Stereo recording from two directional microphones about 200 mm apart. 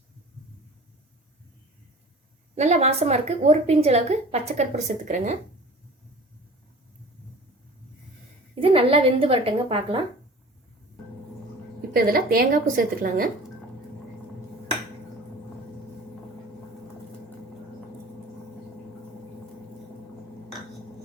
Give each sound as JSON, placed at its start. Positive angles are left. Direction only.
{"t": 2.6, "sound": "a woman's voice", "side_deg": -35}
{"t": 8.6, "sound": "a woman's voice", "side_deg": -25}
{"t": 11.9, "sound": "a woman's voice", "side_deg": -45}